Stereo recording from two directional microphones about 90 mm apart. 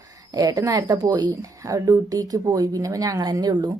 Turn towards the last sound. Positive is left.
turn(degrees=-50)  # may be behind; listen again after turning